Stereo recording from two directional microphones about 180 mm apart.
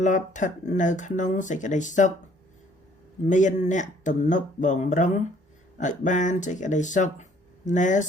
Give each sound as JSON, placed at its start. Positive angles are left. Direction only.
{"t": 0.0, "sound": "speech", "side_deg": 45}
{"t": 3.2, "sound": "speech", "side_deg": 45}